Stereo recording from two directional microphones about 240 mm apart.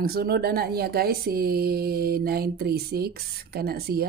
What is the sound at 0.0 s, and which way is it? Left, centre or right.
Speech, right.